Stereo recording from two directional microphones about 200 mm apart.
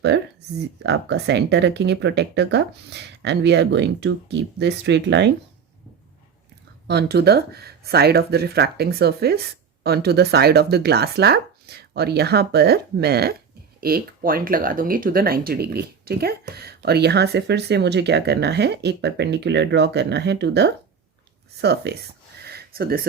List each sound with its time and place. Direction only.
0.1 s speech: 60° right (ahead or behind)
6.8 s speech: 55° right (ahead or behind)
22.4 s a sound: 50° right (ahead or behind)